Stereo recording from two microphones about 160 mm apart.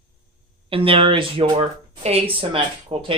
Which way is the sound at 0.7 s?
35° right (ahead or behind).